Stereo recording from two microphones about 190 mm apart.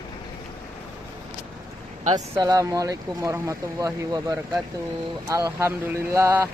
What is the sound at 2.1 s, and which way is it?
Speech, 20° right (ahead or behind).